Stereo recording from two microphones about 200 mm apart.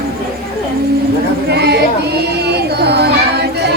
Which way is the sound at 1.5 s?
55° right (ahead or behind).